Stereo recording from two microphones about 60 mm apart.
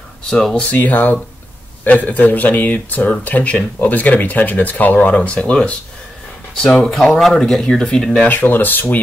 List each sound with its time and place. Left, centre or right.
0.3 s speech: centre
0.7 s speech: left
6.5 s speech: centre
8.3 s speech: left